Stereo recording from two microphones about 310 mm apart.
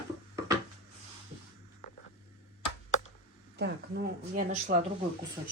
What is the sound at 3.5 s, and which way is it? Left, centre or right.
Speech, right.